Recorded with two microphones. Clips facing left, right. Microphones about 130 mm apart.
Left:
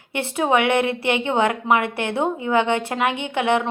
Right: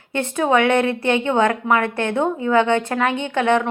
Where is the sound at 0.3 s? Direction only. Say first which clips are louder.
Right 2 dB; 20° left (ahead or behind).